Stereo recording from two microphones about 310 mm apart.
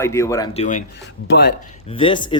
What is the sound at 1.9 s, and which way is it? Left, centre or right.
Speech, centre.